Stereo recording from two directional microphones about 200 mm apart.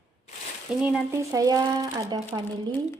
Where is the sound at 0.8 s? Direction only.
5° right (ahead or behind).